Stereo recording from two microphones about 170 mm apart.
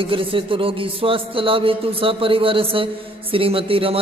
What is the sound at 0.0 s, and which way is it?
A man's voice, 30° right (ahead or behind).